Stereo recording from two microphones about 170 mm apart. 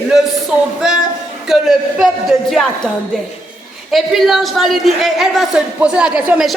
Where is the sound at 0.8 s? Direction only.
5° right (ahead or behind).